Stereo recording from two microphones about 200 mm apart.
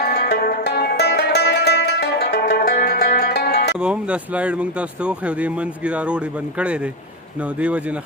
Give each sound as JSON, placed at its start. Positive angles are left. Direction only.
{"t": 0.0, "sound": "music", "side_deg": 55}
{"t": 3.8, "sound": "speech", "side_deg": -5}